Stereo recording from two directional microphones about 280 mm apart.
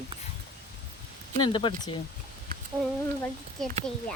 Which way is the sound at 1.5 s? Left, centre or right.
Centre.